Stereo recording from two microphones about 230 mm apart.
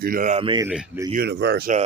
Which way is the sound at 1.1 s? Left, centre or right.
Right.